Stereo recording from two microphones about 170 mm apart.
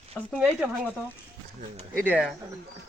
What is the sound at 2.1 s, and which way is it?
Speech, 5° right (ahead or behind).